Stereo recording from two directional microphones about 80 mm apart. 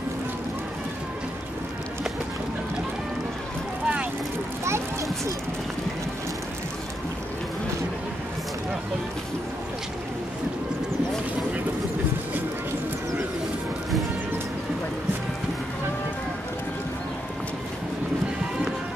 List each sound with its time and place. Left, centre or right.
3.8 s boat: centre